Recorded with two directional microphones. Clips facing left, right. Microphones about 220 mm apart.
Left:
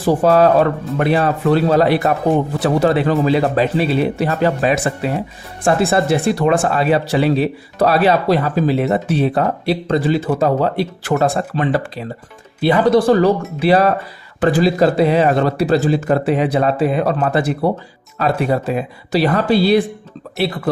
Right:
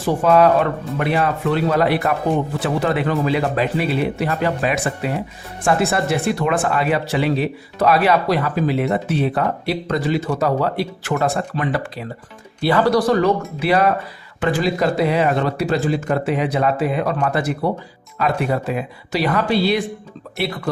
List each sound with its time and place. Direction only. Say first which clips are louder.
0.0 s speech: left 2 dB; 35° left (ahead or behind)